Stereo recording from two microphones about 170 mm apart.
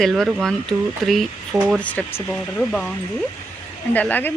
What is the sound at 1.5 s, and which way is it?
Speech, 15° right (ahead or behind).